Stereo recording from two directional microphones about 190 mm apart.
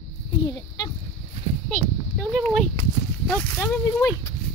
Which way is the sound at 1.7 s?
Centre (ahead or behind).